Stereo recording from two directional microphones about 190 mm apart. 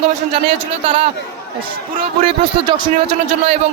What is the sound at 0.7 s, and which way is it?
A man's voice, 25° right (ahead or behind).